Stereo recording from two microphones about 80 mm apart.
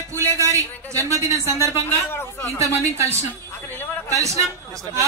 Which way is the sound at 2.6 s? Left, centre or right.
Right.